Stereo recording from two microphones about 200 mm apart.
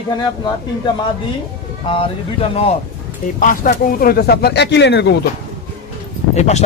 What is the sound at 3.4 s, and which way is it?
Speech, 45° left (ahead or behind).